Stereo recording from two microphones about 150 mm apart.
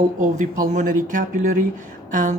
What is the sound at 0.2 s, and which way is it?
Speech, 55° right (ahead or behind).